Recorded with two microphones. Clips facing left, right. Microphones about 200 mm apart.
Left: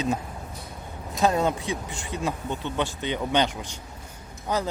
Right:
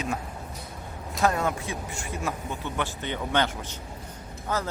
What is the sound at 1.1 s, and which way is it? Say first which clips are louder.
Speech: left 3 dB; 20° left (ahead or behind).